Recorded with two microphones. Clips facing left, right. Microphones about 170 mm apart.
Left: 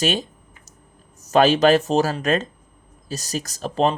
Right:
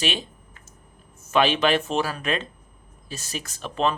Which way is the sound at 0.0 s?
45° left (ahead or behind).